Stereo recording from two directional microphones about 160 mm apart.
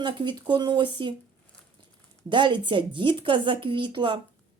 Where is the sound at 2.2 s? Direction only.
30° right (ahead or behind).